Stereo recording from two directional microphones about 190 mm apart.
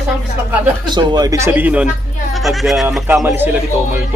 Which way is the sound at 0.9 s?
20° right (ahead or behind).